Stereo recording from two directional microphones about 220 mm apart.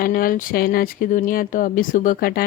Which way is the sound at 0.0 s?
40° left (ahead or behind).